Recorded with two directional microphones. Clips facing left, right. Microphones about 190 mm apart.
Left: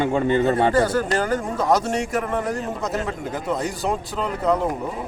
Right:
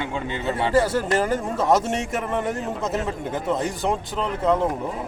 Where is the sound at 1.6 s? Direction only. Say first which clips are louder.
Even; centre (ahead or behind).